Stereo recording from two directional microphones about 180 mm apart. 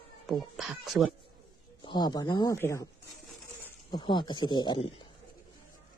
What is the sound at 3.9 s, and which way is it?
Speech, 25° left (ahead or behind).